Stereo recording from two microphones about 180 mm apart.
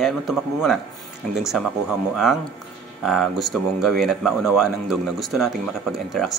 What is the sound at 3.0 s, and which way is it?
Speech, centre (ahead or behind).